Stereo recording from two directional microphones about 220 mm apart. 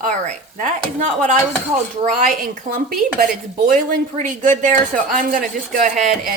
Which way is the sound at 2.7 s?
40° right (ahead or behind).